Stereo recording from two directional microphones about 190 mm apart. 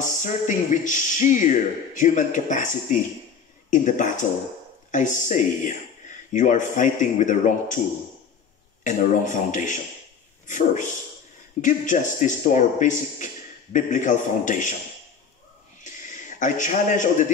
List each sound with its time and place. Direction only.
0.0 s speech: 40° left (ahead or behind)
8.8 s speech: 40° left (ahead or behind)
15.8 s a sound: 40° left (ahead or behind)